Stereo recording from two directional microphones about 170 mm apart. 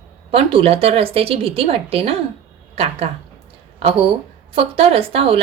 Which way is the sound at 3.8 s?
35° right (ahead or behind).